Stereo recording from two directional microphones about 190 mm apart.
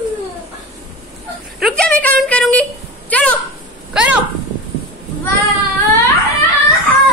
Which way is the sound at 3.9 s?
5° right (ahead or behind).